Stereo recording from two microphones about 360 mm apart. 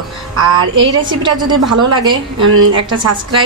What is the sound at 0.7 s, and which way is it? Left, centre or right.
Speech, centre.